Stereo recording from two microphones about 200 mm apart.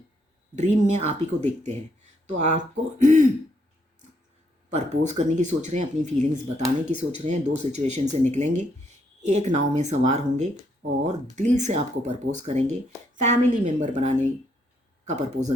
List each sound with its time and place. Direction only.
0.5 s speech: 35° right (ahead or behind)
4.7 s speech: 35° right (ahead or behind)